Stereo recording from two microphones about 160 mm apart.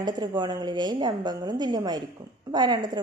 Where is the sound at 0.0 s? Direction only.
25° right (ahead or behind).